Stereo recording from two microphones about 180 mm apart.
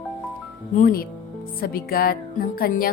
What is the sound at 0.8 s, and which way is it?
Speech, 55° left (ahead or behind).